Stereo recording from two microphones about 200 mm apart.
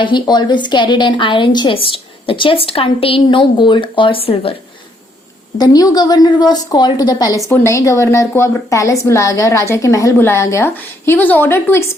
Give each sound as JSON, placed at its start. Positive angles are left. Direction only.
{"t": 0.0, "sound": "a woman's voice", "side_deg": 20}
{"t": 5.5, "sound": "a woman's voice", "side_deg": 20}